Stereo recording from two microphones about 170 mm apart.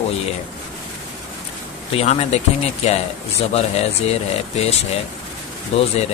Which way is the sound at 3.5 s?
40° left (ahead or behind).